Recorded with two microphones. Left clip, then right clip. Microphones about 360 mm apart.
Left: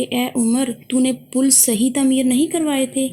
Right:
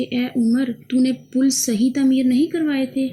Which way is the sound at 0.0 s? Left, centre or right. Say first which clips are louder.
Left 2 dB; centre.